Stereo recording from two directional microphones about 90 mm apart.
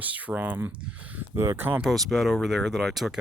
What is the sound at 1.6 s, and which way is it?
Speech, 20° right (ahead or behind).